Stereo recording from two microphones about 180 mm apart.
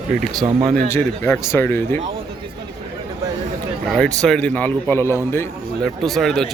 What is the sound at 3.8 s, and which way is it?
Speech, centre (ahead or behind).